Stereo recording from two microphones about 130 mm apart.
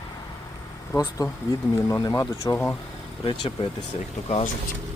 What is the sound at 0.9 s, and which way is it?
Speech, 20° left (ahead or behind).